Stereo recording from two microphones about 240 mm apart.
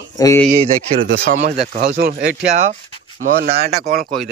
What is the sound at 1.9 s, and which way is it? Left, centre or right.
Speech, right.